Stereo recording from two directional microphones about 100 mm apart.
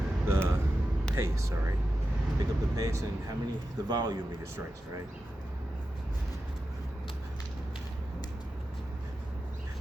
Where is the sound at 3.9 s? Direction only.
45° right (ahead or behind).